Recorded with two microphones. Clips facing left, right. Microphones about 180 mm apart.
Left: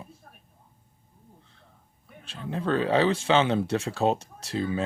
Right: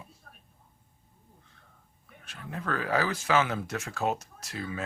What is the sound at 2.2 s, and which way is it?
Speech, 30° left (ahead or behind).